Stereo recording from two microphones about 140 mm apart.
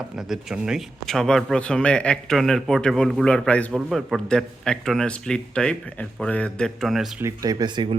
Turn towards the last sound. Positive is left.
turn(degrees=-35)  # may be behind; listen again after turning